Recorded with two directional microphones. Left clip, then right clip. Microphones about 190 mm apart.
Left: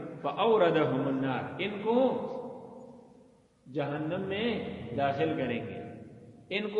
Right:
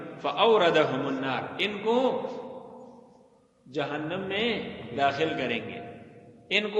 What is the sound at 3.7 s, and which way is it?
A man's voice, 40° right (ahead or behind).